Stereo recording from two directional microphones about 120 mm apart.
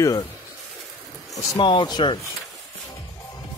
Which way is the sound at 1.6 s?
45° left (ahead or behind).